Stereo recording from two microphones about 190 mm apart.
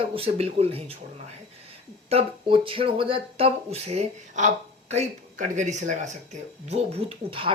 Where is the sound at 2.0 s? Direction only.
30° right (ahead or behind).